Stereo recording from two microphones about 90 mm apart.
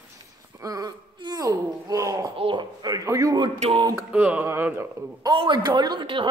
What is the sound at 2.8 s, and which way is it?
Speech, 40° right (ahead or behind).